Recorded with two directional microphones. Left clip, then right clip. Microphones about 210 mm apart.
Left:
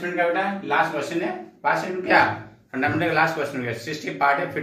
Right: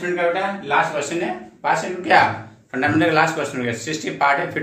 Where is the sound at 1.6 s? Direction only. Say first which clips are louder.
Right 2 dB; 20° right (ahead or behind).